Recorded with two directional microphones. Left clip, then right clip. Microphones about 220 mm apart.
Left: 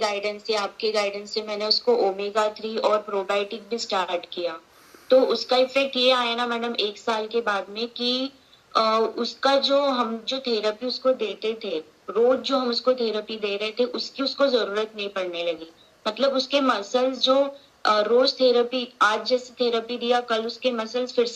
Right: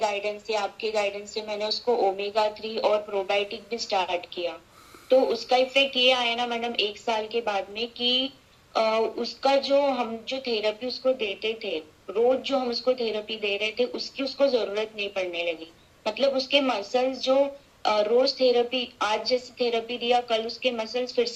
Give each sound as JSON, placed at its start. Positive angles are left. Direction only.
{"t": 0.0, "sound": "speech", "side_deg": 25}
{"t": 7.9, "sound": "speech", "side_deg": 65}
{"t": 9.1, "sound": "speech", "side_deg": 25}